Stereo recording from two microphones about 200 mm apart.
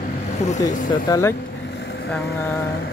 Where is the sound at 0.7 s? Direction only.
40° left (ahead or behind).